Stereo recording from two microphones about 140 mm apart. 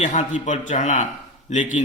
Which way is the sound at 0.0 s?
60° left (ahead or behind).